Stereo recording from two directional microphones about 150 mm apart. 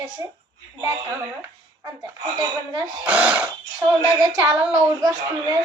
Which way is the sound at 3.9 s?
25° right (ahead or behind).